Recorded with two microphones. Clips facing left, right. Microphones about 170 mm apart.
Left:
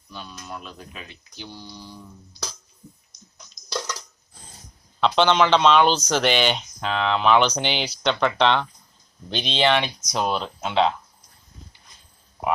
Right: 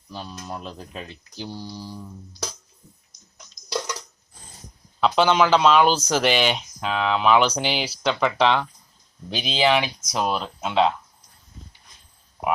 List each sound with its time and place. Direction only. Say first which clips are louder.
0.1 s speech: right 3 dB; 35° right (ahead or behind)
4.9 s speech: even; 5° right (ahead or behind)